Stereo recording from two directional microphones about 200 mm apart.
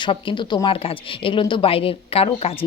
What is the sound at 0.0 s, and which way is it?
A woman's voice, 25° left (ahead or behind).